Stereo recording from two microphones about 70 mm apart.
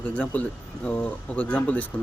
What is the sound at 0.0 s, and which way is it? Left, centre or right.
Speech, centre.